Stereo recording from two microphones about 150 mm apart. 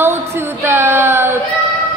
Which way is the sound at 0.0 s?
15° right (ahead or behind).